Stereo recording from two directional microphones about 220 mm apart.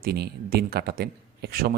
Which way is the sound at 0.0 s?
45° right (ahead or behind).